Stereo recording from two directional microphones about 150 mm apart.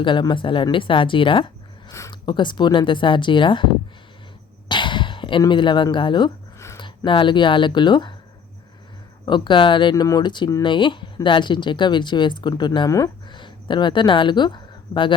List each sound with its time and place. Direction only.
0.0 s speech: 30° left (ahead or behind)
4.7 s speech: 30° left (ahead or behind)
9.2 s speech: 30° left (ahead or behind)